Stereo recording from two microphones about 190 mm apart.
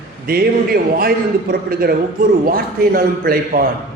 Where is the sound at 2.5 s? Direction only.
50° right (ahead or behind).